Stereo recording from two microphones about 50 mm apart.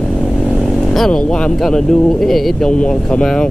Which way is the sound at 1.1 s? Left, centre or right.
Centre.